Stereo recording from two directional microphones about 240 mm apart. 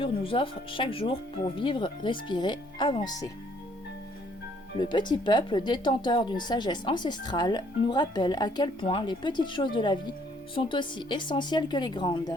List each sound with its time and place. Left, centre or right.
0.0 s a woman's voice: left
4.8 s a woman's voice: centre